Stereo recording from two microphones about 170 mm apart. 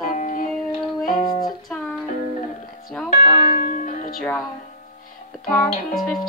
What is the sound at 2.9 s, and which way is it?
Speech, 5° left (ahead or behind).